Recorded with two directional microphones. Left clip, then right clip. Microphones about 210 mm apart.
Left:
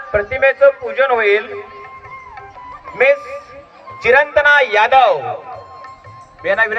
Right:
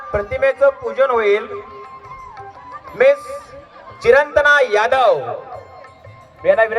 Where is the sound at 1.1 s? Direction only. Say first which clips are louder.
Left 2 dB; 60° right (ahead or behind).